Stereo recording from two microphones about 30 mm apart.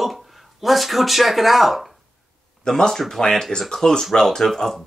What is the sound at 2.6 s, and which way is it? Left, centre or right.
Speech, left.